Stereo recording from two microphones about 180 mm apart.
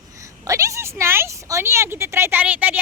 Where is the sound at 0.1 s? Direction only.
20° right (ahead or behind).